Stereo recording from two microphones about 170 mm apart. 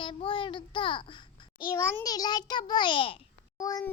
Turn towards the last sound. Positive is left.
turn(degrees=20)  # may be behind; listen again after turning